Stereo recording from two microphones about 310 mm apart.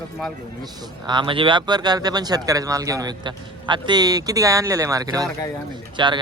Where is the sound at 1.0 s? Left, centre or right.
Centre.